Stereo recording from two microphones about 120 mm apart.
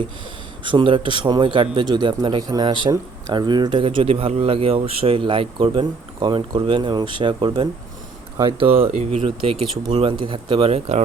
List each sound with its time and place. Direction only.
0.6 s speech: 45° right (ahead or behind)
8.9 s speech: 90° right
9.2 s speech: 50° right (ahead or behind)